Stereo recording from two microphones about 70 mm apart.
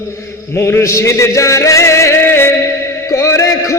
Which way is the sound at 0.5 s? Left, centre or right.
Left.